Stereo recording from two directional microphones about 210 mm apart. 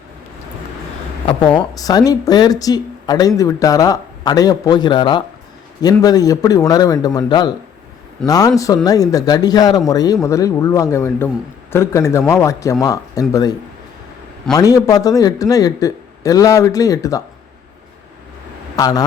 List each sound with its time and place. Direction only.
1.3 s speech: 20° left (ahead or behind)
18.8 s speech: 15° left (ahead or behind)